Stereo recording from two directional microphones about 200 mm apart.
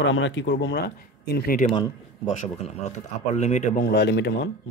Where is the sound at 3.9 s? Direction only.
60° left (ahead or behind).